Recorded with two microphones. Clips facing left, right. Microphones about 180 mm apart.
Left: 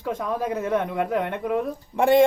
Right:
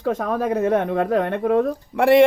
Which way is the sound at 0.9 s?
80° right.